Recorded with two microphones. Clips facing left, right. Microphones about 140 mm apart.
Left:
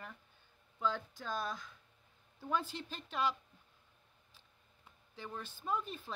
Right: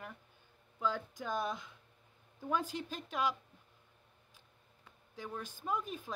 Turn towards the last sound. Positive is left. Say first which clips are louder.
# right 1 dB
turn(degrees=-10)  # may be behind; listen again after turning